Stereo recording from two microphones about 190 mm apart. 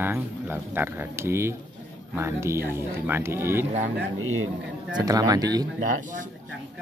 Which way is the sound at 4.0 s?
90° right.